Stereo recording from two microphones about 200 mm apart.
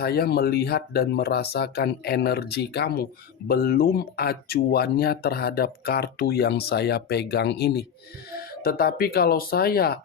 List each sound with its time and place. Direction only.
0.0 s speech: 50° left (ahead or behind)